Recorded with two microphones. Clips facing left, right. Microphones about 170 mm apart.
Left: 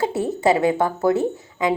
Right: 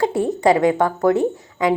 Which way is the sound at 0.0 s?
25° left (ahead or behind).